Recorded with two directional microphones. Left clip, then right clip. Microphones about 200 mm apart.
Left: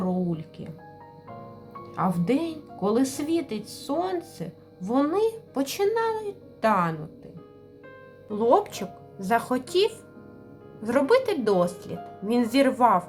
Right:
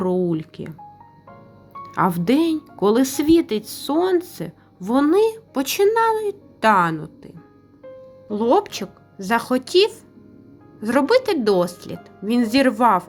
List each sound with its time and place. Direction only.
0.0 s music: 30° right (ahead or behind)
1.9 s speech: 30° right (ahead or behind)
8.3 s speech: 15° right (ahead or behind)